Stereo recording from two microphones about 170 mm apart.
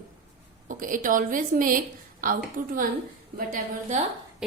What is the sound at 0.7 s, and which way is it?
A woman's voice, 50° right (ahead or behind).